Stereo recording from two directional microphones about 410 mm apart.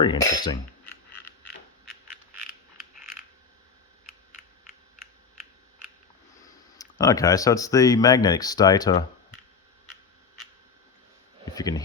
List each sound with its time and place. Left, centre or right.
0.0 s speech: centre
6.7 s speech: centre
11.5 s speech: centre